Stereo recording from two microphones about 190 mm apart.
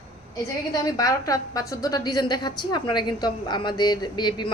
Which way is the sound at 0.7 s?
20° left (ahead or behind).